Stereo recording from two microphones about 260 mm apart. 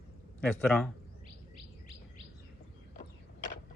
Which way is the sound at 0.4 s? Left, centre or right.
Centre.